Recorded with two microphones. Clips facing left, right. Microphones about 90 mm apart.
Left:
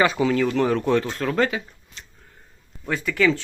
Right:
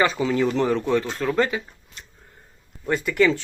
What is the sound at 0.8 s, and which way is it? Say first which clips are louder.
Speech: left 1 dB; 15° right (ahead or behind).